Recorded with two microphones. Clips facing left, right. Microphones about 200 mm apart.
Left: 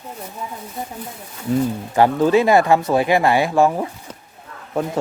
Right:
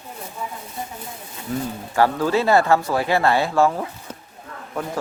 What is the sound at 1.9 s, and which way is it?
Speech, 20° left (ahead or behind).